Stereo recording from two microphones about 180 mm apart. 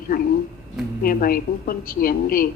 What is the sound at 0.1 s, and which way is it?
A woman's voice, 55° left (ahead or behind).